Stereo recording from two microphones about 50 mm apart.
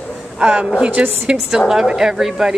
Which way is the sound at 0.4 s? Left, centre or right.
Right.